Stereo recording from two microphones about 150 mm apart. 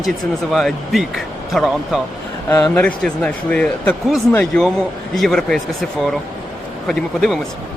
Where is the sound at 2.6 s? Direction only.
10° left (ahead or behind).